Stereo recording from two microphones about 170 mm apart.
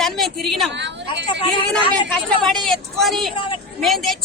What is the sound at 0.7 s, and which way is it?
Speech, 90° right.